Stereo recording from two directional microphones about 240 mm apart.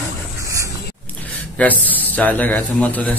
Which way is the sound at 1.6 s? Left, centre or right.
Centre.